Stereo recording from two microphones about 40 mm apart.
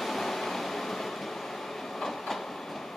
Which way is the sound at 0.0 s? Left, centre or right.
Centre.